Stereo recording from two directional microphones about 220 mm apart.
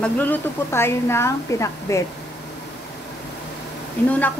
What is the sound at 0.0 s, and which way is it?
A woman's voice, 10° left (ahead or behind).